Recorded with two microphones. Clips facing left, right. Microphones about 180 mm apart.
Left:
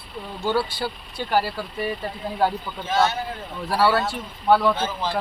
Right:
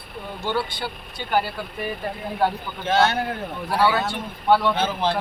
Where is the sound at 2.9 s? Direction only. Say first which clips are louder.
Right 2 dB; 65° right (ahead or behind).